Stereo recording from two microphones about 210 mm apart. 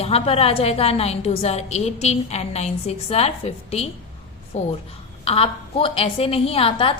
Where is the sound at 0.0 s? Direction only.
30° left (ahead or behind).